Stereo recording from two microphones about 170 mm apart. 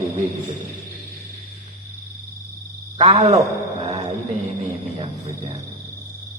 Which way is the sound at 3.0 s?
40° right (ahead or behind).